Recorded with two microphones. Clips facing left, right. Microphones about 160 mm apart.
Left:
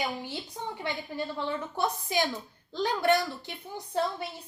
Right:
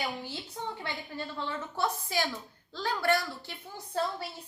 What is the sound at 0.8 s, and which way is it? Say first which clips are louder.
A woman's voice: left 4 dB; 15° left (ahead or behind).